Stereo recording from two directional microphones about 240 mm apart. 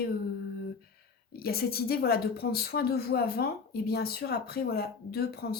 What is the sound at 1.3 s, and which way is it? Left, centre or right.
Speech, left.